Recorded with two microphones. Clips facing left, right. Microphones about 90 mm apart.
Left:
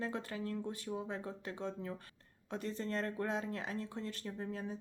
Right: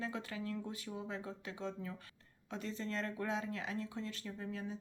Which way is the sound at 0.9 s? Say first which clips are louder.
Left 7 dB; 5° left (ahead or behind).